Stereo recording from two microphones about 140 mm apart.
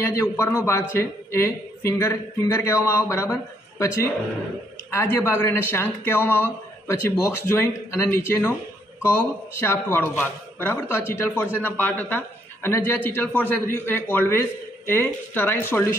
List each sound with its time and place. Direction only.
0.0 s a woman's voice: 20° left (ahead or behind)